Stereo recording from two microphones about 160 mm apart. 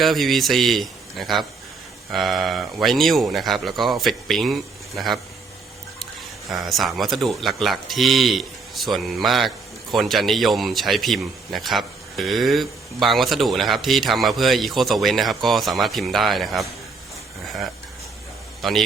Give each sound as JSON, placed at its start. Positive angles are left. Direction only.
{"t": 0.0, "sound": "speech", "side_deg": 0}
{"t": 6.5, "sound": "speech", "side_deg": 0}
{"t": 18.6, "sound": "speech", "side_deg": 0}